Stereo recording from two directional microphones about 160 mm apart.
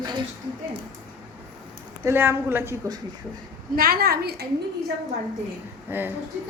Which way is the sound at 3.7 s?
65° right (ahead or behind).